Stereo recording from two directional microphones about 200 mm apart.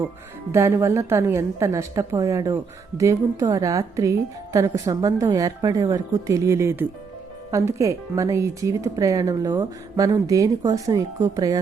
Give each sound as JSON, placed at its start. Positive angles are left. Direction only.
{"t": 0.5, "sound": "speech", "side_deg": -15}